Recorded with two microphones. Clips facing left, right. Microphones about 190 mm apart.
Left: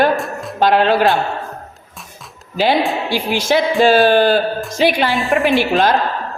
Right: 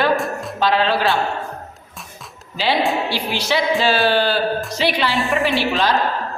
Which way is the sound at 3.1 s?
45° left (ahead or behind).